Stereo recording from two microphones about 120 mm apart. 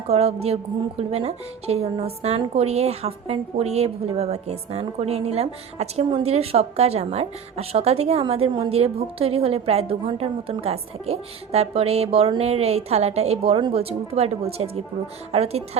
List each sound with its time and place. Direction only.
0.1 s a woman's voice: 60° right (ahead or behind)